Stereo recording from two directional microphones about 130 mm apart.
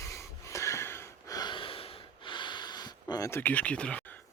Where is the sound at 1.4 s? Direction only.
40° left (ahead or behind).